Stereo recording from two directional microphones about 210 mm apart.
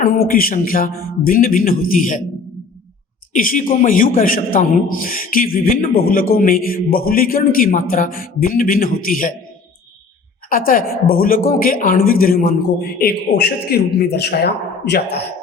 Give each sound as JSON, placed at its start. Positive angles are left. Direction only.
{"t": 0.0, "sound": "a man's voice", "side_deg": 45}
{"t": 3.3, "sound": "a man's voice", "side_deg": 40}
{"t": 10.5, "sound": "a man's voice", "side_deg": 40}